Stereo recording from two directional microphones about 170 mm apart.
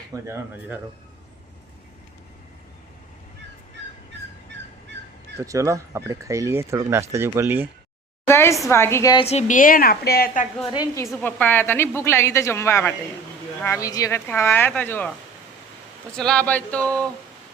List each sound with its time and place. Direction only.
0.1 s speech: 15° right (ahead or behind)
5.4 s speech: 20° right (ahead or behind)
8.3 s a woman's voice: 15° left (ahead or behind)
9.1 s a woman's voice: 40° left (ahead or behind); by 10.4 s 60° left (ahead or behind)
10.7 s a woman's voice: 20° left (ahead or behind)
16.1 s a woman's voice: 5° left (ahead or behind)